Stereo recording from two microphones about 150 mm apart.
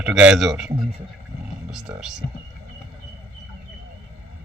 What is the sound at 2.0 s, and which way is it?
Speech, 5° right (ahead or behind).